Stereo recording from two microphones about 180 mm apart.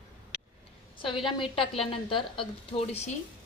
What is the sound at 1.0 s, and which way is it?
A woman's voice, 30° left (ahead or behind).